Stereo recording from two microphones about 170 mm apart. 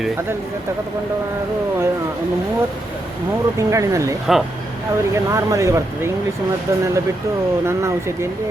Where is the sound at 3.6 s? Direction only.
20° right (ahead or behind).